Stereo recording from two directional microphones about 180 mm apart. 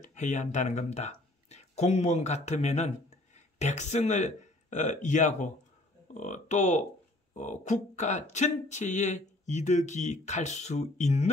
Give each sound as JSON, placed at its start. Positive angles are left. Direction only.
{"t": 0.0, "sound": "speech", "side_deg": 40}